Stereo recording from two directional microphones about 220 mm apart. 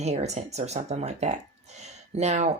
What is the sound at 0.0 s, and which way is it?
Speech, 30° right (ahead or behind).